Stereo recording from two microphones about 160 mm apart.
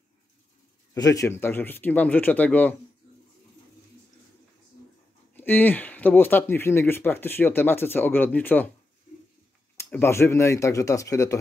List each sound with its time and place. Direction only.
0.9 s speech: 20° left (ahead or behind)
5.3 s speech: 10° left (ahead or behind)
9.8 s speech: 15° left (ahead or behind)